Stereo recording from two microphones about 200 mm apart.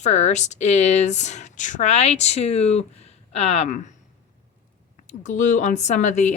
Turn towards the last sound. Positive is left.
turn(degrees=35)  # may be behind; listen again after turning